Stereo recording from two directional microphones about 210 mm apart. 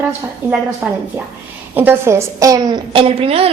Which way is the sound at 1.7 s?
10° right (ahead or behind).